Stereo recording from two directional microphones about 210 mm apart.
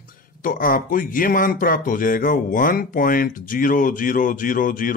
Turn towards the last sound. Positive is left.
turn(degrees=40)  # may be behind; listen again after turning